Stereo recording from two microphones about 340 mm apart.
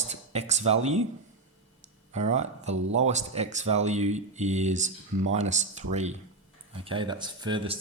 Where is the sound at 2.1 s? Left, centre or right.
Centre.